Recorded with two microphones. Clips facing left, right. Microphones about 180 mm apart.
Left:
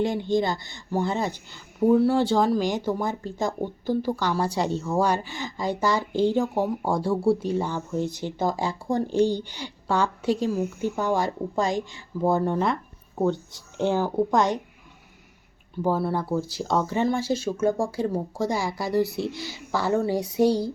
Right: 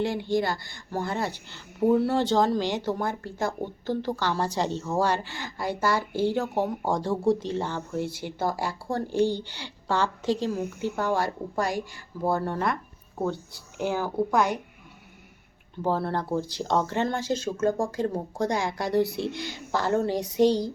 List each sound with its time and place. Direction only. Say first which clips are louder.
0.3 s speech: left 2 dB; 20° left (ahead or behind)
1.8 s speech: left 3 dB; centre (ahead or behind); by 13.9 s 20° left (ahead or behind)
15.8 s speech: left 2 dB; 10° left (ahead or behind)